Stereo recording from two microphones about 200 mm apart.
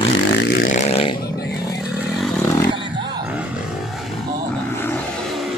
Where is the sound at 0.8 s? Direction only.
30° left (ahead or behind).